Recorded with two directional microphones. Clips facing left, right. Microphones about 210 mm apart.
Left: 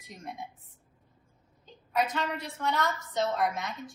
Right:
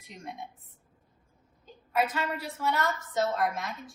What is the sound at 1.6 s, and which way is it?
A woman's voice, 5° right (ahead or behind).